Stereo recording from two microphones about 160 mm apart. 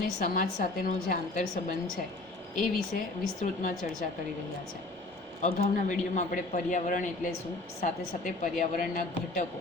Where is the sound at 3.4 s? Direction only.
50° left (ahead or behind).